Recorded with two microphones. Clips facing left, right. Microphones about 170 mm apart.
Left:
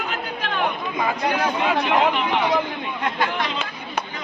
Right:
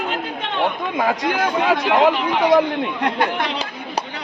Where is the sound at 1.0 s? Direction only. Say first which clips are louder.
Right 2 dB; 80° right.